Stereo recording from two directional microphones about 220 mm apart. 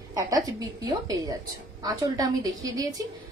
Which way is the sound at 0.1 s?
15° right (ahead or behind).